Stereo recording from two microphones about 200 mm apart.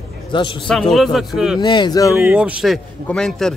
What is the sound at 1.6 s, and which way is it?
Speech, 20° left (ahead or behind).